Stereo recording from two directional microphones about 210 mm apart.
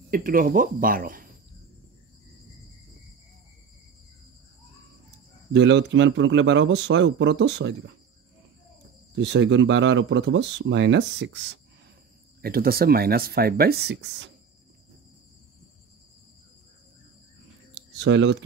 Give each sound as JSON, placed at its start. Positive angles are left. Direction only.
{"t": 0.1, "sound": "speech", "side_deg": -40}
{"t": 5.5, "sound": "speech", "side_deg": -60}
{"t": 9.1, "sound": "speech", "side_deg": -60}
{"t": 12.4, "sound": "speech", "side_deg": -45}
{"t": 17.9, "sound": "speech", "side_deg": -60}